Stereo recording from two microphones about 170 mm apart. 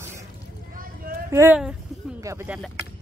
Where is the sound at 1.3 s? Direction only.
10° right (ahead or behind).